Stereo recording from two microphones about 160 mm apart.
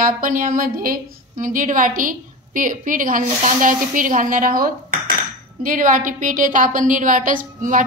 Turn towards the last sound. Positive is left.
turn(degrees=-55)  # may be behind; listen again after turning